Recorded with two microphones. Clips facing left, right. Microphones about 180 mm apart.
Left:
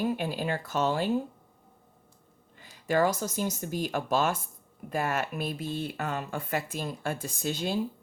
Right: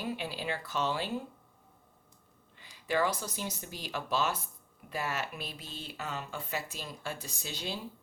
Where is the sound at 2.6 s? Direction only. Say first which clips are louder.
Left 5 dB; 45° left (ahead or behind).